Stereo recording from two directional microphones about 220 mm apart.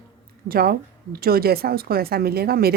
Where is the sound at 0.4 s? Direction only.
40° right (ahead or behind).